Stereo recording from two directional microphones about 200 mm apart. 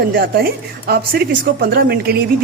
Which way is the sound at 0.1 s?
50° right (ahead or behind).